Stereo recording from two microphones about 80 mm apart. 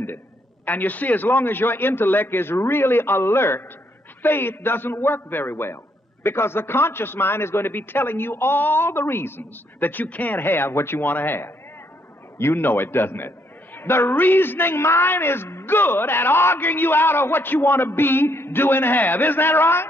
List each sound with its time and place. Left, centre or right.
0.7 s a man's voice: left